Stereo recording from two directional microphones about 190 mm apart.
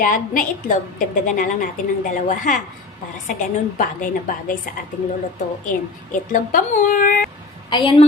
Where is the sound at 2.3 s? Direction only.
40° left (ahead or behind).